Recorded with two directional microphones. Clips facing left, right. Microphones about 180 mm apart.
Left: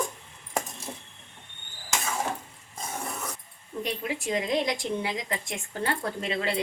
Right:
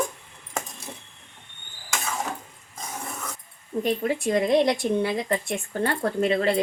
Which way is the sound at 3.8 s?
50° right (ahead or behind).